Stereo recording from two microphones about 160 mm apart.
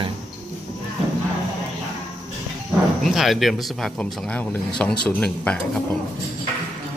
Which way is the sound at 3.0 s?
Centre (ahead or behind).